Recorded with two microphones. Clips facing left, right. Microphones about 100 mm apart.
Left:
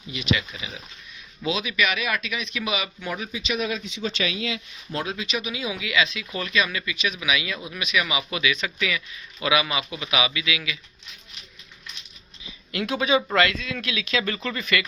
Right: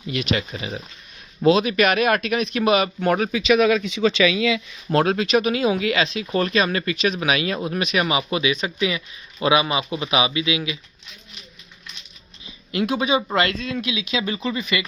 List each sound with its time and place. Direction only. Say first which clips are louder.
0.1 s speech: right 2 dB; 60° right (ahead or behind)
0.3 s speech: right 5 dB; 45° right (ahead or behind); by 10.8 s 30° right (ahead or behind)
12.8 s speech: right 2 dB; 20° right (ahead or behind)
13.5 s speech: right 4 dB; 40° right (ahead or behind)
13.8 s speech: left 2 dB; 15° right (ahead or behind)